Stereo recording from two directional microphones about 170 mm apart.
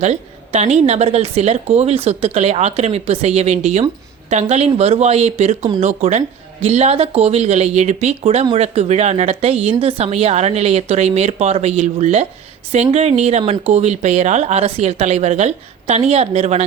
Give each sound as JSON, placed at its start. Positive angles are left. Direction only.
{"t": 0.0, "sound": "a woman's voice", "side_deg": -40}